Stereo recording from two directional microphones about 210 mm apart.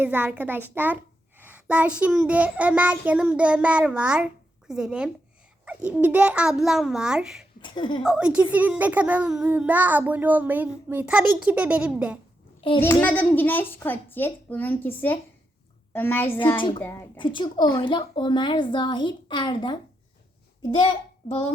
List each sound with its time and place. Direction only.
0.0 s a woman's voice: 10° right (ahead or behind)
7.6 s a woman's voice: 20° left (ahead or behind)
8.0 s a child's voice: 5° right (ahead or behind)
12.8 s a child's voice: 10° left (ahead or behind)
16.6 s a woman's voice: 20° left (ahead or behind)
16.8 s a child's voice: 10° left (ahead or behind)
17.2 s a woman's voice: 25° left (ahead or behind)